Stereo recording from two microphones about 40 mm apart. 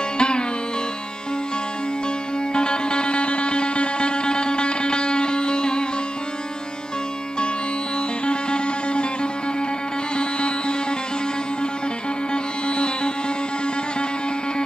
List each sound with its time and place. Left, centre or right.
0.2 s sitar: left
2.5 s music: left
8.3 s music: left
12.6 s music: left